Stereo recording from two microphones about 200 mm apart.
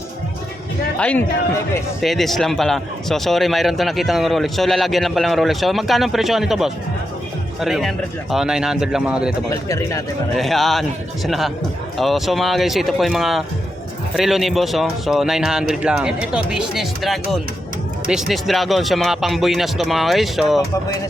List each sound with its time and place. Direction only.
0.9 s a man's voice: 5° left (ahead or behind)
9.5 s speech: 15° left (ahead or behind)
10.3 s a man's voice: centre (ahead or behind)